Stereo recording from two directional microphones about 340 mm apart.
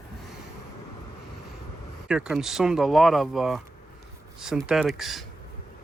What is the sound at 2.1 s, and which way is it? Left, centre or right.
Speech, centre.